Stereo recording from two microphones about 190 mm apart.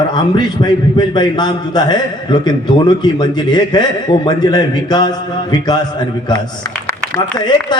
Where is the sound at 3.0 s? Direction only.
20° left (ahead or behind).